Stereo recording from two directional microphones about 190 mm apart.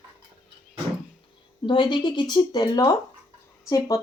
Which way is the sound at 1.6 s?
25° left (ahead or behind).